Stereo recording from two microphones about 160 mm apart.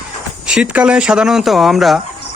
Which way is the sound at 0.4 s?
5° right (ahead or behind).